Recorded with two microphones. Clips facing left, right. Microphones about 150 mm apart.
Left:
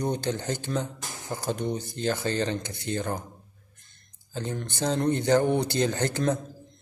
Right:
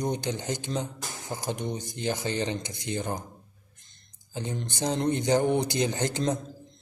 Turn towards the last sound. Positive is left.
turn(degrees=-15)  # may be behind; listen again after turning